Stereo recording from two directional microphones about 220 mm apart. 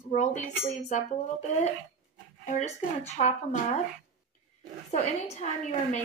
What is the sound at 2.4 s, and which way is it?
Speech, 30° left (ahead or behind).